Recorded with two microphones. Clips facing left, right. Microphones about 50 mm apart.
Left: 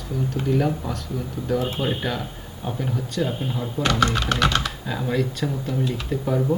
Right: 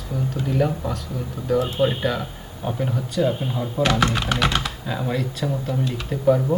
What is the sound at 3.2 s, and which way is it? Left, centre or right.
Speech, centre.